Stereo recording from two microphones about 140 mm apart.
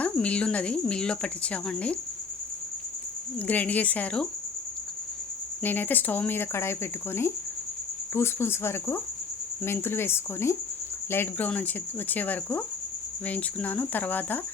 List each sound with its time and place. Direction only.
0.0 s speech: 10° left (ahead or behind)
3.3 s speech: 10° left (ahead or behind)
5.6 s speech: 15° left (ahead or behind)